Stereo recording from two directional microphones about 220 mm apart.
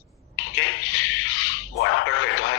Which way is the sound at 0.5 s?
70° left (ahead or behind).